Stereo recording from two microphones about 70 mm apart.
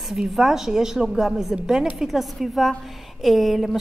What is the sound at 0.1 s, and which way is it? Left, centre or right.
A woman's voice, centre.